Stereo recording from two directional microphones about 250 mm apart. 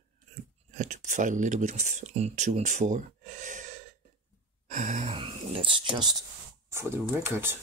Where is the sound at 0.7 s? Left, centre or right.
Right.